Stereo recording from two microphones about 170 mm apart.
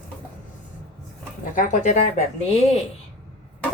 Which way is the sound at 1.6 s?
45° left (ahead or behind).